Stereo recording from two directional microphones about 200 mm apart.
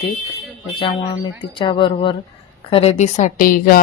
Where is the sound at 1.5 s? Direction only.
25° left (ahead or behind); by 3.8 s 45° left (ahead or behind).